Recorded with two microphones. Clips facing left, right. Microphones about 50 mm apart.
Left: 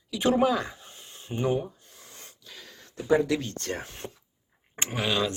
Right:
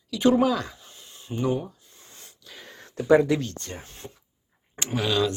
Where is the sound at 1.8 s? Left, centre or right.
Left.